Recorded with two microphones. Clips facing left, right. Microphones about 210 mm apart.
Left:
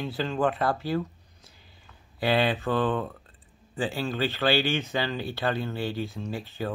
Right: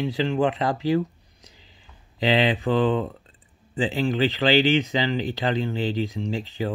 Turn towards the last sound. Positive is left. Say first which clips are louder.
# right 5 dB
turn(degrees=-15)  # may be behind; listen again after turning